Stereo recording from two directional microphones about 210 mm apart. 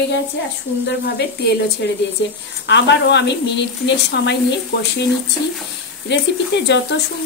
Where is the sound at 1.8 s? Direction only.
55° left (ahead or behind).